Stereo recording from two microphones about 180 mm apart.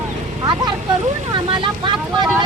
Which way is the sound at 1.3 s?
25° right (ahead or behind).